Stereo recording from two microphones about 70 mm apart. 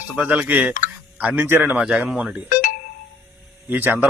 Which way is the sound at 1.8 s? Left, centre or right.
Centre.